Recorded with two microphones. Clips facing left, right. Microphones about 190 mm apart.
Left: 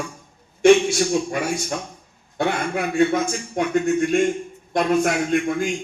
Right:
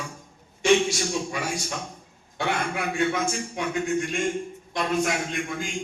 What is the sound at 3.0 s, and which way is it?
A man's voice, 45° left (ahead or behind).